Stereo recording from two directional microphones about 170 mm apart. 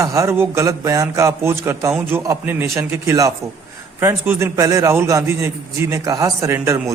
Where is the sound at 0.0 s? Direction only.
20° right (ahead or behind).